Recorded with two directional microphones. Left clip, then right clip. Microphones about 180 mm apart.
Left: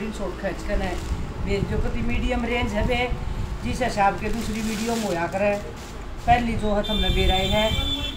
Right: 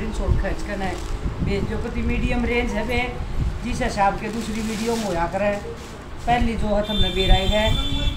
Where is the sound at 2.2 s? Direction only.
5° left (ahead or behind).